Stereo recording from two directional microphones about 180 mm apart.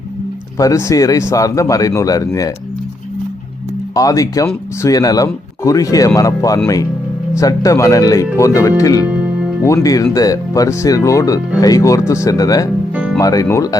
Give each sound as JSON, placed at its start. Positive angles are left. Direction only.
{"t": 0.6, "sound": "speech", "side_deg": 15}
{"t": 3.9, "sound": "speech", "side_deg": 20}
{"t": 9.0, "sound": "music", "side_deg": -5}
{"t": 9.6, "sound": "speech", "side_deg": 20}